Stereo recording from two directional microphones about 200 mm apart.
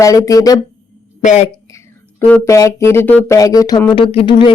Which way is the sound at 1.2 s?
35° left (ahead or behind).